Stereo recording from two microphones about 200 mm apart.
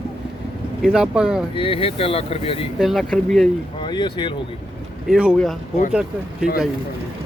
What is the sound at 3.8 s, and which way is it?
Speech, 20° left (ahead or behind).